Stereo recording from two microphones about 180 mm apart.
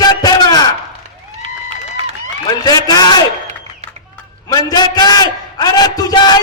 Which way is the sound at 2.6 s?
20° left (ahead or behind).